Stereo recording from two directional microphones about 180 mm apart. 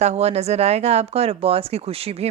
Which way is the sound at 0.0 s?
35° right (ahead or behind).